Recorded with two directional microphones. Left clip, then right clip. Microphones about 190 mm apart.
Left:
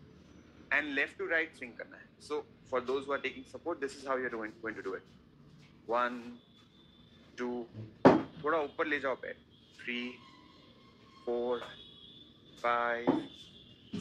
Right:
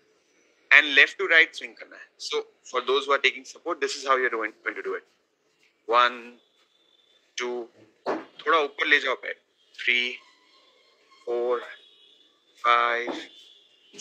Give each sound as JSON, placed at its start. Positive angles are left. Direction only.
{"t": 0.7, "sound": "a man's voice", "side_deg": -25}
{"t": 7.3, "sound": "a man's voice", "side_deg": -25}
{"t": 11.3, "sound": "a man's voice", "side_deg": -35}
{"t": 12.6, "sound": "a man's voice", "side_deg": -30}